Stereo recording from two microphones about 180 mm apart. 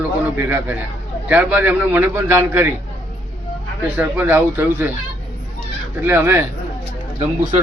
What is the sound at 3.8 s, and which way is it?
A man's voice, 10° right (ahead or behind).